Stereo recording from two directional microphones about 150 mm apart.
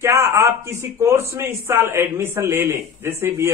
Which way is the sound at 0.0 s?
15° right (ahead or behind).